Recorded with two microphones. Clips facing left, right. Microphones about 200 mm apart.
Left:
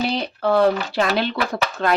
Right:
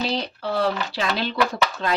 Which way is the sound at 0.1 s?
55° left (ahead or behind).